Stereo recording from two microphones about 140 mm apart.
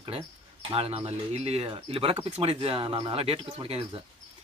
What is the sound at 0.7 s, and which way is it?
Speech, 45° right (ahead or behind).